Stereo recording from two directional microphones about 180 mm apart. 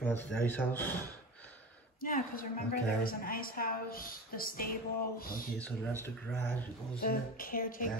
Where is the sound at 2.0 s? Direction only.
50° left (ahead or behind).